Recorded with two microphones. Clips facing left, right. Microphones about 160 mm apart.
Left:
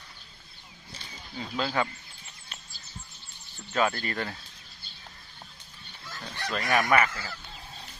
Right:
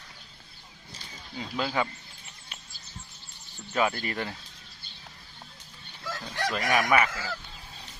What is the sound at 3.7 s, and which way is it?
Speech, 15° right (ahead or behind).